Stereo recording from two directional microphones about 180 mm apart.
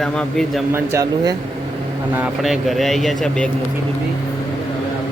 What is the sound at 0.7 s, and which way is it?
Speech, 20° right (ahead or behind).